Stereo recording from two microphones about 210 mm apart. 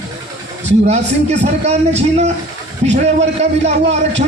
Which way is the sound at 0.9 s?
30° right (ahead or behind).